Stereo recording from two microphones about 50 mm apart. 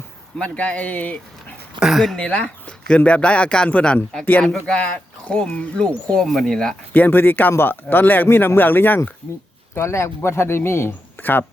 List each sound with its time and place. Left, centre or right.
0.3 s speech: left
1.8 s speech: centre
2.1 s speech: left
4.4 s speech: centre
6.2 s speech: centre
6.9 s speech: left
9.7 s a man's voice: left
10.2 s speech: left
11.2 s speech: left